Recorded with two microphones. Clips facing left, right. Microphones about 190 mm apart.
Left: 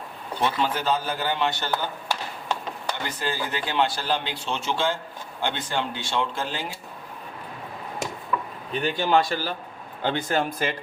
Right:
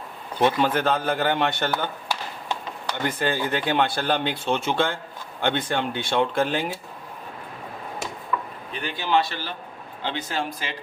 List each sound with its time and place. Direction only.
0.4 s speech: 55° right (ahead or behind)
3.1 s speech: 55° right (ahead or behind)
8.7 s a man's voice: 40° left (ahead or behind)